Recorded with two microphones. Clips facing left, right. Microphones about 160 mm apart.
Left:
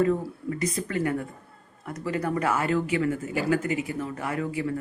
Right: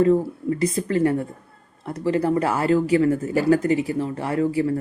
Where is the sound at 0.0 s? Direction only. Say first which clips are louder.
Right 6 dB; 30° right (ahead or behind).